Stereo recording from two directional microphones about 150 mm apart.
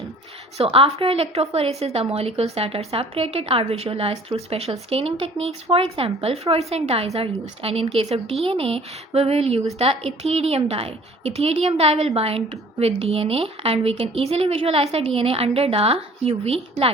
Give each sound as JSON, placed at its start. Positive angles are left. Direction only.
{"t": 0.6, "sound": "a woman's voice", "side_deg": -40}